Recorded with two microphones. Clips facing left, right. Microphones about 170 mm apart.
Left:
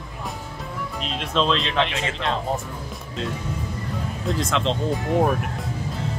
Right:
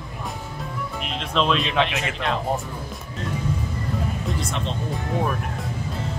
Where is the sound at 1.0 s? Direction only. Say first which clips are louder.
Left 1 dB; 5° right (ahead or behind).